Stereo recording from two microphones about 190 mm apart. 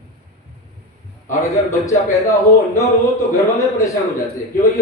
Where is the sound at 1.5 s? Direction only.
15° left (ahead or behind).